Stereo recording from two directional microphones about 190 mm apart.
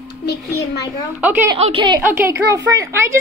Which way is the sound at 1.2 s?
10° right (ahead or behind).